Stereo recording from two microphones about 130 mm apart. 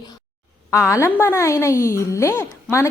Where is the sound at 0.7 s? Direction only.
25° left (ahead or behind).